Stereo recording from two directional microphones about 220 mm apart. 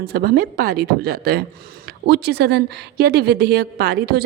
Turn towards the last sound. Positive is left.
turn(degrees=-45)  # may be behind; listen again after turning